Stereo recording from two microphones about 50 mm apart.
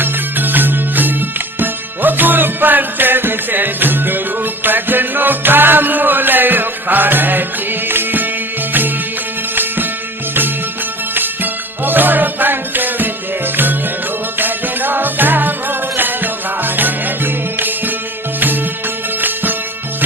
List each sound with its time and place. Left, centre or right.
0.0 s music: right
11.9 s music: right
14.3 s music: right